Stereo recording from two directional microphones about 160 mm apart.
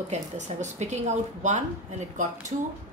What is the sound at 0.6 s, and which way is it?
A woman's voice, 45° right (ahead or behind).